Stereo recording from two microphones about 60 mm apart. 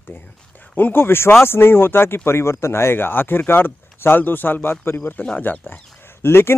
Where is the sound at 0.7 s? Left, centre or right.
Left.